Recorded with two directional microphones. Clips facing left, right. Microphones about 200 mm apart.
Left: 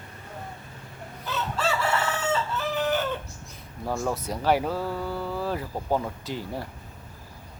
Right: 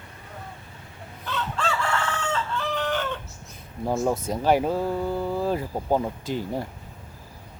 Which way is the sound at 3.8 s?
20° right (ahead or behind).